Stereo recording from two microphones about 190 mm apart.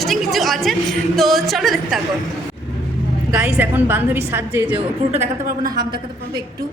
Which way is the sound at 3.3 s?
10° right (ahead or behind).